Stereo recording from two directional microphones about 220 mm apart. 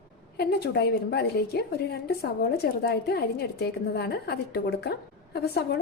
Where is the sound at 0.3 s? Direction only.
50° left (ahead or behind).